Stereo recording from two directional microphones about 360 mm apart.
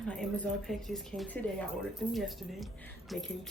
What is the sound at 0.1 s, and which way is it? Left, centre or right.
Speech, centre.